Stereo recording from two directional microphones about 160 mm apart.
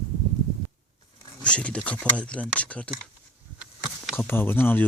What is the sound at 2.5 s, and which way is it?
Speech, 10° left (ahead or behind).